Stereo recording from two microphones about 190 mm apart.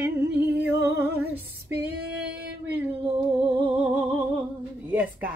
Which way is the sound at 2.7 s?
10° right (ahead or behind).